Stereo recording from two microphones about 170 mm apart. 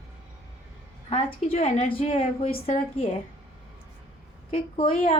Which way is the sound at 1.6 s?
40° left (ahead or behind).